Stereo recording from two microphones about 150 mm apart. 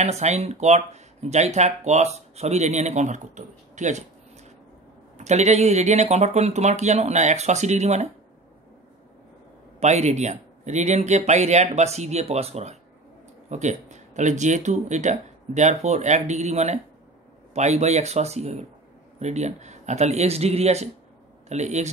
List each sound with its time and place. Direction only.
0.0 s speech: 50° right (ahead or behind)
5.1 s speech: 50° right (ahead or behind)
9.8 s speech: 50° right (ahead or behind)